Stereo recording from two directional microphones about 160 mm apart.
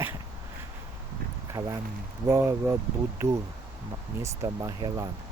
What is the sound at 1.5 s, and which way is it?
Speech, 20° right (ahead or behind).